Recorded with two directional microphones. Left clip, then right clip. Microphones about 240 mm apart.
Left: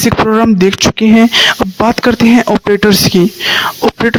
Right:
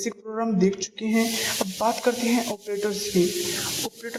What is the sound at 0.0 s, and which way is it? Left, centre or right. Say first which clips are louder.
Speech: left 19 dB; left.